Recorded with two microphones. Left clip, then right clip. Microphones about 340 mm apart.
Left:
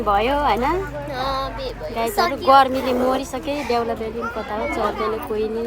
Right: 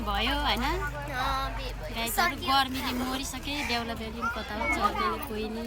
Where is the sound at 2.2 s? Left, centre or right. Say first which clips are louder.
Left 11 dB; centre.